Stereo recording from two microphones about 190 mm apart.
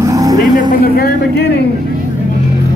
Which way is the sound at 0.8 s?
55° left (ahead or behind).